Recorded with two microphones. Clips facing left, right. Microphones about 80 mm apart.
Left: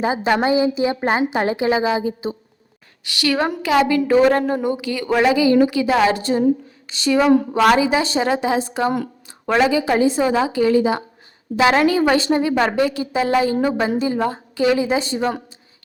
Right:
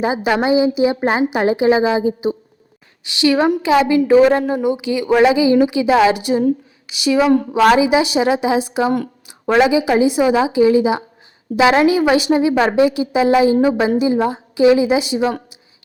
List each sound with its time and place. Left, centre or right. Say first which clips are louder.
0.0 s a woman's voice: right 1 dB; centre